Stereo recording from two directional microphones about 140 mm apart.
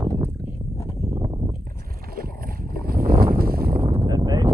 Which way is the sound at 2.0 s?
90° right.